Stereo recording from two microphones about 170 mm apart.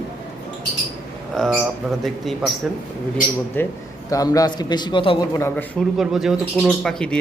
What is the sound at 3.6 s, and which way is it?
Speech, 10° left (ahead or behind).